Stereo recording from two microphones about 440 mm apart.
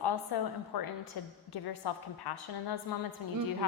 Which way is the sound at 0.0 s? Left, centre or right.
Left.